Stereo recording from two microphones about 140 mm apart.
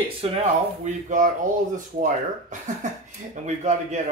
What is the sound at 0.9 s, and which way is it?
Speech, 60° right (ahead or behind).